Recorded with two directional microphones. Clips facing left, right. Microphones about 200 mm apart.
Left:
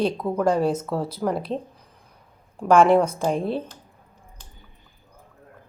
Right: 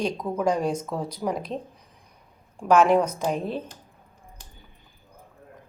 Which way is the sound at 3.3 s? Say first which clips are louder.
Left 4 dB; 35° left (ahead or behind).